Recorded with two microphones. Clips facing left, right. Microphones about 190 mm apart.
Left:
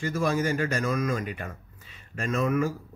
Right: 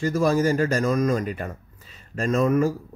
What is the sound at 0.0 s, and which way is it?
A man's voice, 40° right (ahead or behind).